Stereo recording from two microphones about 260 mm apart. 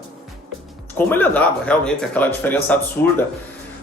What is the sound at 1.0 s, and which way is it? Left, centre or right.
Speech, centre.